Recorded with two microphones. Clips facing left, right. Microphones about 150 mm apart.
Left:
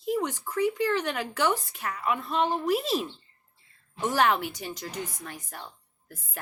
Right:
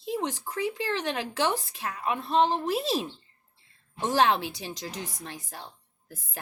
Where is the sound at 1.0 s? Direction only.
20° right (ahead or behind).